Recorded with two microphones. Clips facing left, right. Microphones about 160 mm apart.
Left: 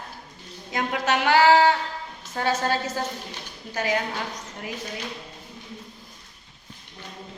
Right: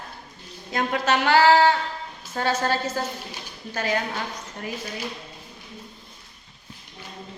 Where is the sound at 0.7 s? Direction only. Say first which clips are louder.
Right 2 dB; 15° left (ahead or behind).